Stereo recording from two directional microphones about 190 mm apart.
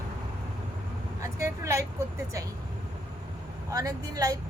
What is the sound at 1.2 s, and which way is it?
Speech, 15° right (ahead or behind).